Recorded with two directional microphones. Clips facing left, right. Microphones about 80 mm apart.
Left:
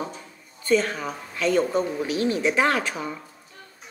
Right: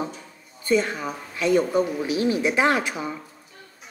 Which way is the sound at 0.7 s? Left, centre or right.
Centre.